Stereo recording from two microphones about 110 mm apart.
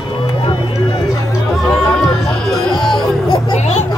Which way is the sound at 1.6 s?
Centre (ahead or behind).